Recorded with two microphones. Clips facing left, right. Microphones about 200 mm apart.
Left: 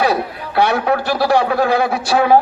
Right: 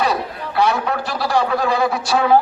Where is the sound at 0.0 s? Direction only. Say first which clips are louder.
Left 3 dB; 60° left (ahead or behind).